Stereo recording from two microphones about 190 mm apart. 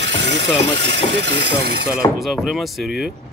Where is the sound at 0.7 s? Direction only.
70° right (ahead or behind).